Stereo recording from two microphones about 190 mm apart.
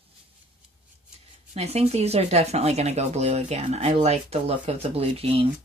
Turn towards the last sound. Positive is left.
turn(degrees=-30)  # may be behind; listen again after turning